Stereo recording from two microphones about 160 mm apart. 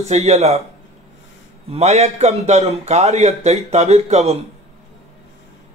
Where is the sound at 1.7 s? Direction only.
45° right (ahead or behind).